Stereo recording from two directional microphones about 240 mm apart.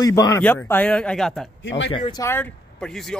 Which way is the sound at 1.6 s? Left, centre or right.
Left.